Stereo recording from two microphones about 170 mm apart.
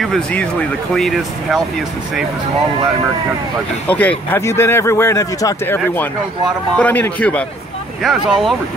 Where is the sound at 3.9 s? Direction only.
10° left (ahead or behind).